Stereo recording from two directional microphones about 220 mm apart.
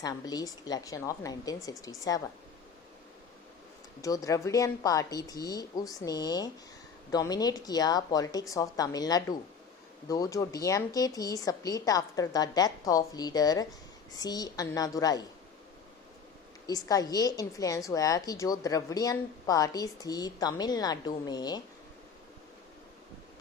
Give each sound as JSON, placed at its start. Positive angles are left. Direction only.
{"t": 0.0, "sound": "a woman's voice", "side_deg": 15}
{"t": 4.0, "sound": "a woman's voice", "side_deg": 15}
{"t": 16.6, "sound": "a woman's voice", "side_deg": 15}